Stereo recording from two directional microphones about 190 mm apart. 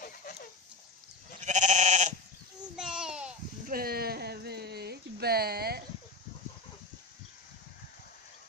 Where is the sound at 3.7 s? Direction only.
50° right (ahead or behind).